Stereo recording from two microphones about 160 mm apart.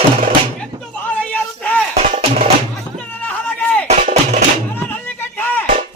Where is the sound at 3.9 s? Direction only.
45° right (ahead or behind).